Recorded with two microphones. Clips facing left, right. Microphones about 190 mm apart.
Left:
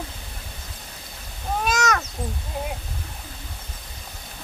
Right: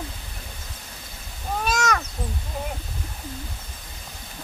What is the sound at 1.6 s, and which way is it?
Cat, centre (ahead or behind).